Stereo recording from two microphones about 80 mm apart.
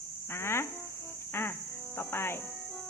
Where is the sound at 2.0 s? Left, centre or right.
Left.